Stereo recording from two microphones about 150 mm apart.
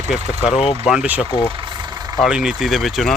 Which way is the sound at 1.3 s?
35° left (ahead or behind).